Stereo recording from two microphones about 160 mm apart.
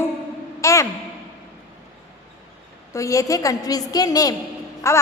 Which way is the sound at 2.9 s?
20° left (ahead or behind).